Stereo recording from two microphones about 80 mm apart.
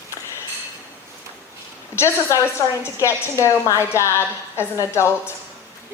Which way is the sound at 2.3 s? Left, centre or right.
Left.